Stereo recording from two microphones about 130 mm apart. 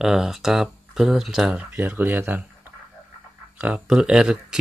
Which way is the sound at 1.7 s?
15° right (ahead or behind).